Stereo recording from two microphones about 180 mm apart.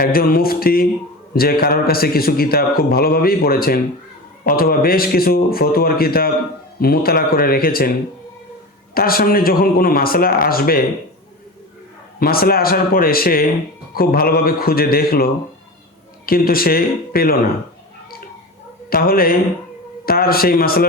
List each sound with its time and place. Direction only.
0.0 s a man's voice: 55° left (ahead or behind)
9.0 s a man's voice: 55° left (ahead or behind)
12.2 s a man's voice: 55° left (ahead or behind)
18.9 s a man's voice: 55° left (ahead or behind)